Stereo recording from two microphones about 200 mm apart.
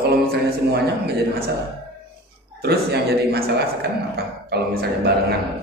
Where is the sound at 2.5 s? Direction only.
55° right (ahead or behind).